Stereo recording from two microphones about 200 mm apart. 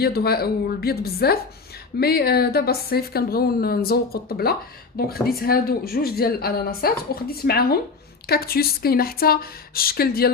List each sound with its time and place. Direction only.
0.0 s a woman's voice: 50° left (ahead or behind)